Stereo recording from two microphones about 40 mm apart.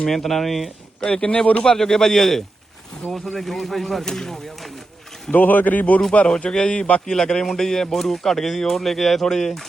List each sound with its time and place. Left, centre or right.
0.0 s speech: centre
1.0 s speech: left
1.6 s speech: centre
5.3 s speech: left
6.2 s speech: left; by 9.2 s centre
9.2 s speech: centre